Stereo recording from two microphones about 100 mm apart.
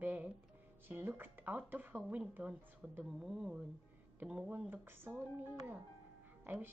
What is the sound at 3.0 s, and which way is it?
Speech, 5° right (ahead or behind).